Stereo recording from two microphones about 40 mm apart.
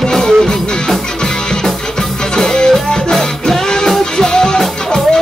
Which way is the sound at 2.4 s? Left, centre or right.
Centre.